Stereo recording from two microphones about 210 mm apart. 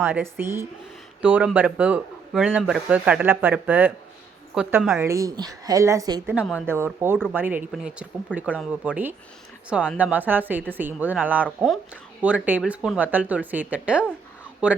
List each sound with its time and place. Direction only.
0.0 s speech: 10° right (ahead or behind)
5.0 s speech: 15° right (ahead or behind)
6.3 s speech: 5° right (ahead or behind)